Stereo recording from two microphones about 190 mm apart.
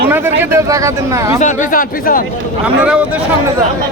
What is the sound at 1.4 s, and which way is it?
Speech, 40° left (ahead or behind).